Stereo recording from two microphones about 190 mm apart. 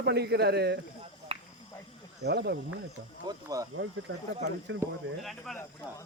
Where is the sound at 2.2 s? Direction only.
60° right (ahead or behind).